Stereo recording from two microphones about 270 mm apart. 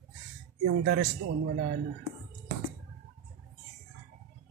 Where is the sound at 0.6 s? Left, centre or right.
Right.